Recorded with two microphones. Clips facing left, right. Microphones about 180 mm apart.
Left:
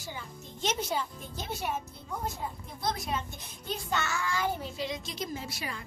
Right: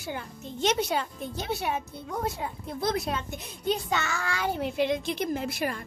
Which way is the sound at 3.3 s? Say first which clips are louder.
Right 9 dB; 65° right (ahead or behind).